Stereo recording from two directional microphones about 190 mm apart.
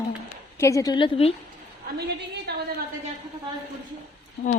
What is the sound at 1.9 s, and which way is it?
Speech, 60° right (ahead or behind).